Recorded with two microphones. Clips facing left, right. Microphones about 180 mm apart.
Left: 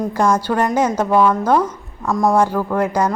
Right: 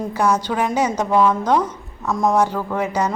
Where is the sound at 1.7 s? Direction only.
10° left (ahead or behind).